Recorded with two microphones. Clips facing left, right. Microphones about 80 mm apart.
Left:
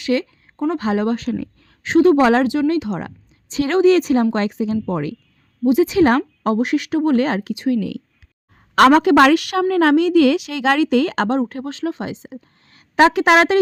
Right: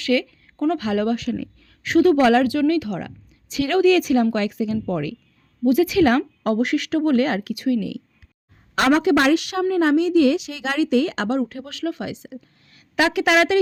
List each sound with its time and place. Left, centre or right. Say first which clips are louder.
0.0 s a sound: left 1 dB; left
0.8 s a woman's voice: left 2 dB; left
7.8 s a woman's voice: left 3 dB; left